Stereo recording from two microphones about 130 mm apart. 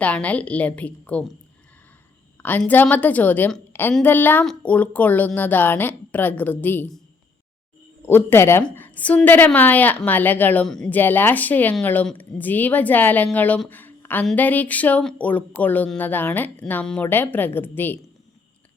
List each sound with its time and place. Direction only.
0.0 s a woman's voice: 10° left (ahead or behind)
2.4 s a woman's voice: 10° left (ahead or behind)
3.7 s a sound: 15° left (ahead or behind)
4.0 s a woman's voice: 15° left (ahead or behind)
8.0 s a woman's voice: 15° left (ahead or behind)
13.7 s a sound: 15° left (ahead or behind)
14.3 s a woman's voice: 15° left (ahead or behind)